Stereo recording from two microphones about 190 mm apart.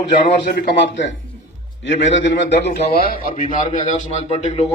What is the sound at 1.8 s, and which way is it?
Speech, 70° left (ahead or behind).